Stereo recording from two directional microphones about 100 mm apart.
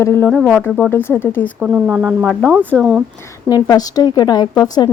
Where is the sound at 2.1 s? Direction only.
5° left (ahead or behind).